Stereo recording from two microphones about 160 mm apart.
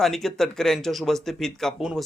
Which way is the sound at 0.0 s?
Centre (ahead or behind).